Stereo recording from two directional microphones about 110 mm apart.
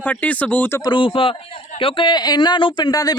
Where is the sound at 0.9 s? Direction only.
50° left (ahead or behind).